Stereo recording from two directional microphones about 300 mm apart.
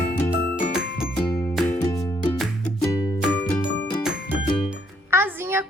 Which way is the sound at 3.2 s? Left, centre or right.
Centre.